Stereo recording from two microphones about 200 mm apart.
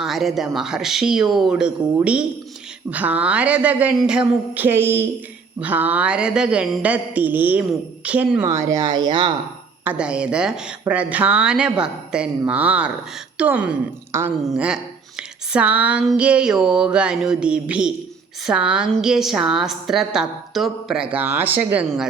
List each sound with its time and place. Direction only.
0.0 s a woman's voice: centre (ahead or behind); by 9.3 s 20° right (ahead or behind)
9.8 s a woman's voice: 5° right (ahead or behind)